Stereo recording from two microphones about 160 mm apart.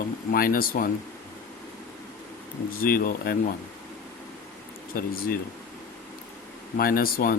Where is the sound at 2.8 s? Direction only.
65° left (ahead or behind).